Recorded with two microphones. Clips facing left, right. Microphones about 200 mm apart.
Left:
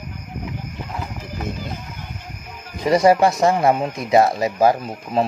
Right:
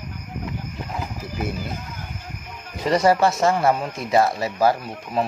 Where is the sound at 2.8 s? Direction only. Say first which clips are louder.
Left 3 dB; 15° left (ahead or behind).